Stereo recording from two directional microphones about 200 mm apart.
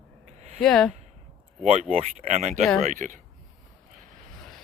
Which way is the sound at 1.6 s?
35° right (ahead or behind).